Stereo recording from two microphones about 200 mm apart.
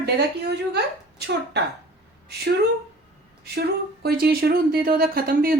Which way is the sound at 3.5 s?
55° right (ahead or behind).